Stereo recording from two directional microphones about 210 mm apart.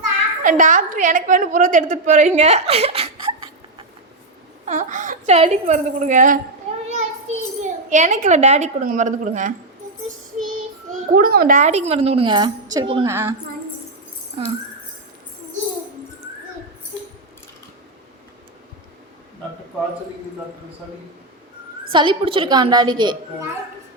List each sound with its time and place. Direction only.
0.4 s a woman's voice: 40° right (ahead or behind)
4.6 s a woman's voice: 35° right (ahead or behind)
6.8 s a sound: 30° right (ahead or behind)
11.1 s a woman's voice: 45° right (ahead or behind); by 13.1 s 25° right (ahead or behind)
13.1 s a woman's voice: 15° right (ahead or behind)
21.9 s a woman's voice: 25° right (ahead or behind)